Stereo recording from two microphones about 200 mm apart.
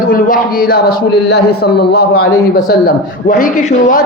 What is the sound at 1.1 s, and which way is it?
A man's voice, 55° left (ahead or behind).